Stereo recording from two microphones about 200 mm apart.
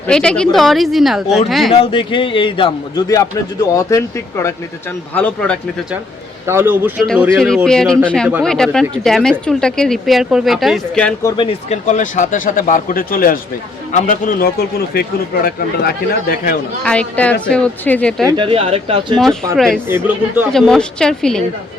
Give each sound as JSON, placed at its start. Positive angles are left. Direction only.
{"t": 0.1, "sound": "speech", "side_deg": 5}
{"t": 1.7, "sound": "a man's voice", "side_deg": 25}
{"t": 6.4, "sound": "a man's voice", "side_deg": -10}
{"t": 7.1, "sound": "speech", "side_deg": 0}
{"t": 11.3, "sound": "speech", "side_deg": 35}
{"t": 16.8, "sound": "speech", "side_deg": 5}
{"t": 18.3, "sound": "speech", "side_deg": -25}
{"t": 19.2, "sound": "speech", "side_deg": 5}